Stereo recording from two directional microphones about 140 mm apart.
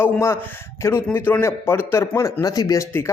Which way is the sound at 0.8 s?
15° left (ahead or behind).